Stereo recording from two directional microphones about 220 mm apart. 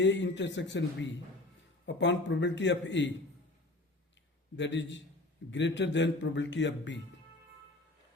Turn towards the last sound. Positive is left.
turn(degrees=55)  # may be behind; listen again after turning